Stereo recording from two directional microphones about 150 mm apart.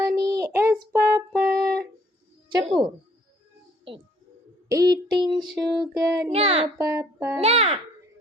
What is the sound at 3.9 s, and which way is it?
Speech, 35° right (ahead or behind).